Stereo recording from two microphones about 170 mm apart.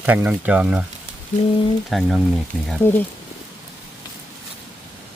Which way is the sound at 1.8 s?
Centre (ahead or behind).